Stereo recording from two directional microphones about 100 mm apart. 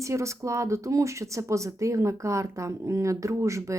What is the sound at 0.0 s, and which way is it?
A woman's voice, 30° right (ahead or behind).